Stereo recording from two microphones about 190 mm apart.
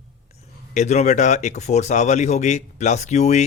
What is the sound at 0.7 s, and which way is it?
Speech, 35° left (ahead or behind).